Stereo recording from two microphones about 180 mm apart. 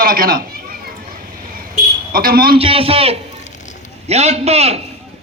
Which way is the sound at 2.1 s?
55° right (ahead or behind).